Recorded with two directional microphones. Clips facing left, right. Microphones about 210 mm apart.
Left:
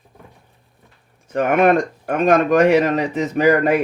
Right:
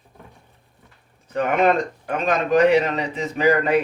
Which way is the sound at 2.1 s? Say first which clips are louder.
Left 6 dB; 50° left (ahead or behind).